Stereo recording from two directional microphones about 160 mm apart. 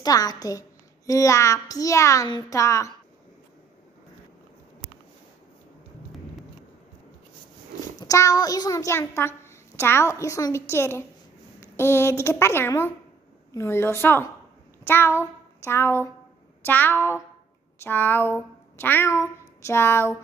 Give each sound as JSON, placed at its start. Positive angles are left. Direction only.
{"t": 0.0, "sound": "a child's voice", "side_deg": 25}
{"t": 8.0, "sound": "a child's voice", "side_deg": 20}
{"t": 14.9, "sound": "child singing", "side_deg": 15}
{"t": 16.6, "sound": "a woman's voice", "side_deg": 10}